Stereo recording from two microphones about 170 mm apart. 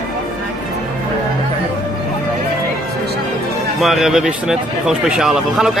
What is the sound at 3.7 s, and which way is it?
Speech, centre (ahead or behind).